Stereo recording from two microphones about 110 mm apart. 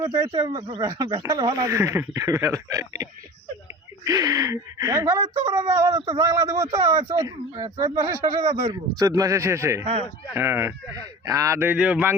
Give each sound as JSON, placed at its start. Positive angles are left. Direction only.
{"t": 0.0, "sound": "speech", "side_deg": -30}